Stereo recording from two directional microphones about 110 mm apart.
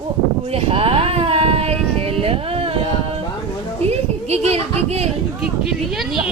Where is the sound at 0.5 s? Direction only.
60° right (ahead or behind).